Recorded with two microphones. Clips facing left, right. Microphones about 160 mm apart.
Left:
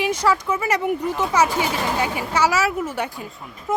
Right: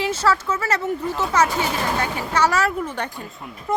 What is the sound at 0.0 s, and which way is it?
Speech, 15° left (ahead or behind).